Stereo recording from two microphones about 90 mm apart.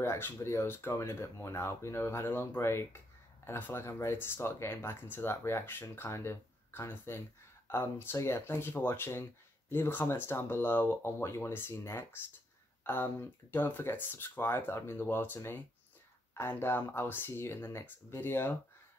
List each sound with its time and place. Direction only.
0.0 s speech: 25° left (ahead or behind)